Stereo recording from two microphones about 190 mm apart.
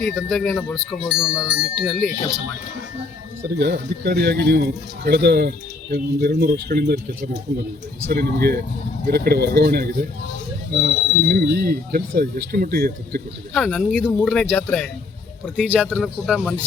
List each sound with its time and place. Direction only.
0.0 s speech: centre (ahead or behind)
3.5 s speech: 55° right (ahead or behind)
13.6 s a man's voice: 5° left (ahead or behind)
15.6 s speech: 5° right (ahead or behind)